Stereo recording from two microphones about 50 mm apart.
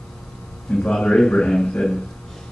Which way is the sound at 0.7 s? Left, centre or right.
Centre.